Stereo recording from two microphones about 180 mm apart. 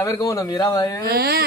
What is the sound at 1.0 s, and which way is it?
Speech, 60° right (ahead or behind).